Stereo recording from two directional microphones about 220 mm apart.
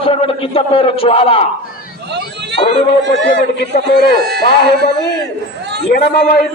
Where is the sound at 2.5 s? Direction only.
25° left (ahead or behind).